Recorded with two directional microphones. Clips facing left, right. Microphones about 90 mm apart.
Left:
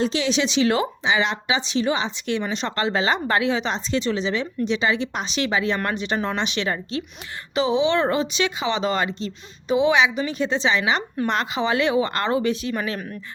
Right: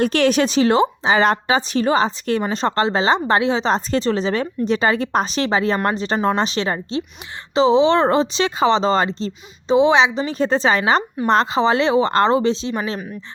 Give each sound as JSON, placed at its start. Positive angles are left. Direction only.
{"t": 0.0, "sound": "speech", "side_deg": -55}
{"t": 1.1, "sound": "speech", "side_deg": -45}